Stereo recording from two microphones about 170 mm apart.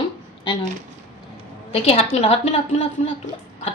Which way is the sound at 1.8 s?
35° left (ahead or behind).